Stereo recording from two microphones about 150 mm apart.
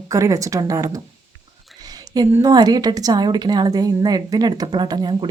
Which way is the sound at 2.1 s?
25° right (ahead or behind).